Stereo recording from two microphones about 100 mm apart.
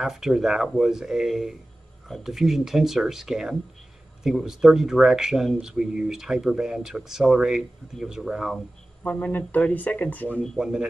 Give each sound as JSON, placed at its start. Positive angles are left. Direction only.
{"t": 0.0, "sound": "speech", "side_deg": -5}
{"t": 9.0, "sound": "speech", "side_deg": 20}
{"t": 10.4, "sound": "speech", "side_deg": 5}